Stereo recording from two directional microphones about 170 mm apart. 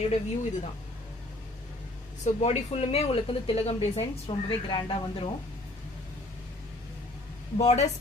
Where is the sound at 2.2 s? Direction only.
40° left (ahead or behind).